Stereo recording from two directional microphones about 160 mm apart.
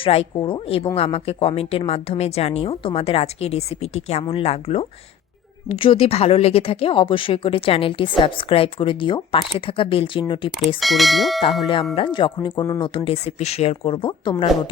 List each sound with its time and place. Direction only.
0.0 s a woman's voice: 35° left (ahead or behind)
10.8 s speech: centre (ahead or behind)
11.6 s a woman's voice: 35° left (ahead or behind)